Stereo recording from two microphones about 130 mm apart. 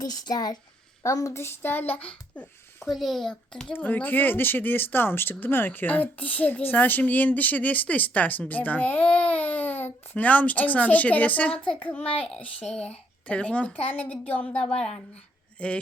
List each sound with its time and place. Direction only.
0.0 s speech: 30° left (ahead or behind); by 2.9 s 10° left (ahead or behind)
2.9 s a child's voice: centre (ahead or behind)